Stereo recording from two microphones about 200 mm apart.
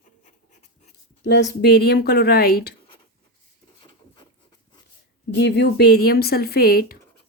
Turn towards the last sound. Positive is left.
turn(degrees=50)  # may be behind; listen again after turning